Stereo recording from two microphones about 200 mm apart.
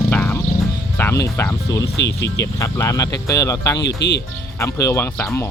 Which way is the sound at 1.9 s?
60° left (ahead or behind).